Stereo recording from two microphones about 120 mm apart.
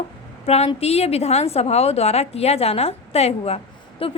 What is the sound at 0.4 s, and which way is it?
A woman's voice, 60° left (ahead or behind).